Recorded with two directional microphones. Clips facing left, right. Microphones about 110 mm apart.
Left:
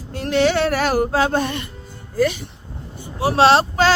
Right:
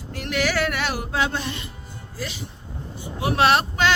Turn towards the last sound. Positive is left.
turn(degrees=35)  # may be behind; listen again after turning